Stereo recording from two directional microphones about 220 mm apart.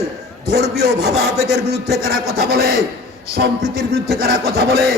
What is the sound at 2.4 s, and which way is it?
Speech, 45° right (ahead or behind).